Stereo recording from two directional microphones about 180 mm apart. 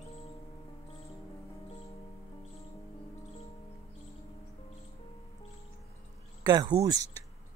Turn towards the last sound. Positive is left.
turn(degrees=-20)  # may be behind; listen again after turning